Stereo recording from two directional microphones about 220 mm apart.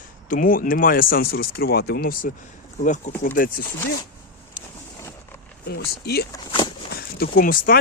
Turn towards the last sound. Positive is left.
turn(degrees=40)  # may be behind; listen again after turning